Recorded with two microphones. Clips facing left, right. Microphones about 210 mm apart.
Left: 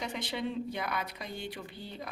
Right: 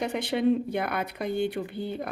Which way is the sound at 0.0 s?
60° right (ahead or behind).